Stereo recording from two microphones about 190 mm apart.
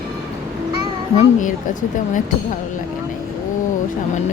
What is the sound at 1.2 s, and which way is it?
A woman's voice, 40° left (ahead or behind).